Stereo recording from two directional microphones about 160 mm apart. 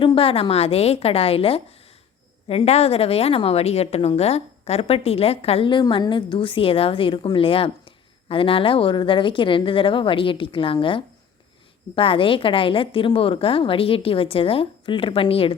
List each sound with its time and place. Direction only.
0.0 s a woman's voice: 35° left (ahead or behind)